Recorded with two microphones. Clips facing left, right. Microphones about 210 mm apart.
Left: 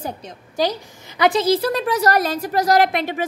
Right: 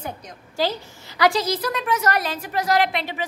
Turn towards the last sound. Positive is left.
turn(degrees=50)  # may be behind; listen again after turning